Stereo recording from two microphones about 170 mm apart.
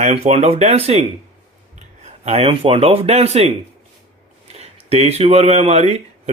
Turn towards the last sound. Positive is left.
turn(degrees=-40)  # may be behind; listen again after turning